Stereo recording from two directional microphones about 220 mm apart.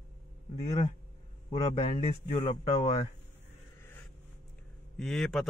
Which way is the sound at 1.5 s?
25° left (ahead or behind).